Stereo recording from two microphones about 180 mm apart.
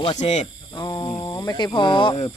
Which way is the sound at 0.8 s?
25° left (ahead or behind).